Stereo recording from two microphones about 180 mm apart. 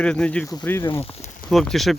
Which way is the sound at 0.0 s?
5° left (ahead or behind).